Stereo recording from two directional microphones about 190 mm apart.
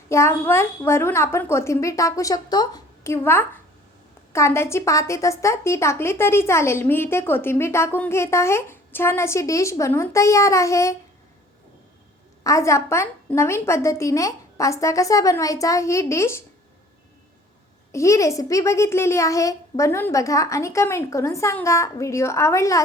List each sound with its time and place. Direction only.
0.1 s a woman's voice: 15° left (ahead or behind)
12.4 s a woman's voice: 15° left (ahead or behind)
17.9 s a woman's voice: 15° left (ahead or behind)